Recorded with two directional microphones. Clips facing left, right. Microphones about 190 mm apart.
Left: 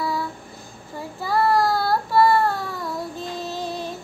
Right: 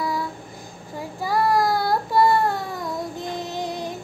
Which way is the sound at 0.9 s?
15° right (ahead or behind).